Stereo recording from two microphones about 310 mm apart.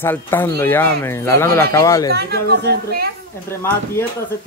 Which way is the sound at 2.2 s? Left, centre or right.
Right.